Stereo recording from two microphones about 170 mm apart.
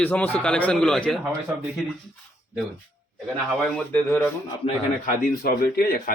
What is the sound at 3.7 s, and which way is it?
Speech, 10° left (ahead or behind).